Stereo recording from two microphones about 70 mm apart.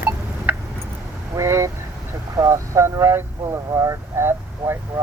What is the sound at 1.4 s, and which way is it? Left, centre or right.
Vehicle, right.